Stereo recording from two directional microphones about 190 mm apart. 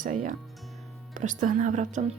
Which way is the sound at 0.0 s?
40° right (ahead or behind).